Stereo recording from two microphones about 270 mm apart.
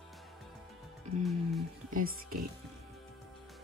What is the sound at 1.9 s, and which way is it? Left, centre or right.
Speech, right.